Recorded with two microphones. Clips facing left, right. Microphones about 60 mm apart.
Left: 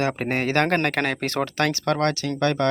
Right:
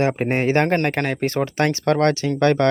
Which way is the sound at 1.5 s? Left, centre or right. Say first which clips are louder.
Right 4 dB; right.